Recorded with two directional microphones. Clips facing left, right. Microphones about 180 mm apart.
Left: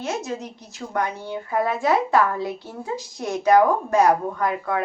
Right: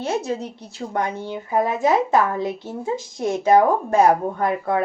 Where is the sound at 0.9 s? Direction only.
25° right (ahead or behind).